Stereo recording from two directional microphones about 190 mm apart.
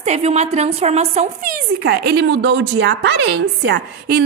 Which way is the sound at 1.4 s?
55° right (ahead or behind).